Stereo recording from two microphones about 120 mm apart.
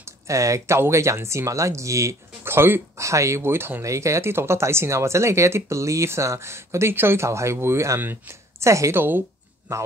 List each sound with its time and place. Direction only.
0.0 s speech: 25° right (ahead or behind)